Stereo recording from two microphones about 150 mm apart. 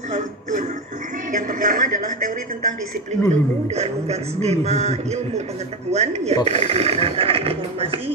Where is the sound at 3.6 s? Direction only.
45° right (ahead or behind).